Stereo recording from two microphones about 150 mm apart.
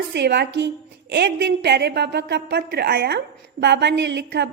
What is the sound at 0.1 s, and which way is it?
A woman's voice, 90° right.